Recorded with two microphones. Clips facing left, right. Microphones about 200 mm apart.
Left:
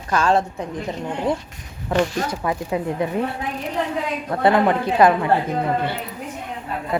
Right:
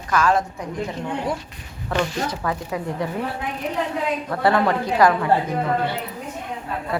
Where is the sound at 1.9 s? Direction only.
20° left (ahead or behind).